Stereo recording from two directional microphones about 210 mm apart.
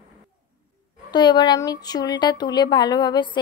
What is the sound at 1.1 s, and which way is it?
A woman's voice, 20° left (ahead or behind).